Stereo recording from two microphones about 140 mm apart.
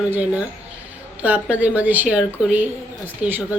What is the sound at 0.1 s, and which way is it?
Speech, 10° right (ahead or behind).